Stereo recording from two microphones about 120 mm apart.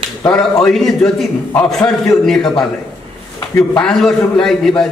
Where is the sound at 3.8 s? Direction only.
5° left (ahead or behind).